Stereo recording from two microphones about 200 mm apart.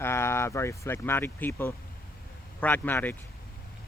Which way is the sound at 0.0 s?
10° left (ahead or behind).